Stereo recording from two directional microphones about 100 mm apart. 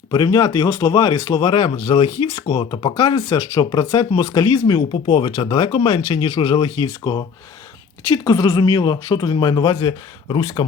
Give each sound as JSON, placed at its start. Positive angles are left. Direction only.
{"t": 0.1, "sound": "speech", "side_deg": 40}
{"t": 1.5, "sound": "speech", "side_deg": 50}
{"t": 4.9, "sound": "speech", "side_deg": 55}